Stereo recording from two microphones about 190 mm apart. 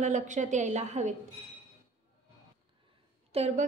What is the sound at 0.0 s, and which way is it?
A woman's voice, 40° right (ahead or behind).